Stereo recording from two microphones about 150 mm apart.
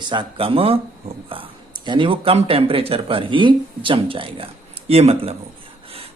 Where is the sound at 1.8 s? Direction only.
35° right (ahead or behind).